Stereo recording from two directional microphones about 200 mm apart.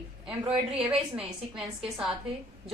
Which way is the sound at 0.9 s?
5° right (ahead or behind).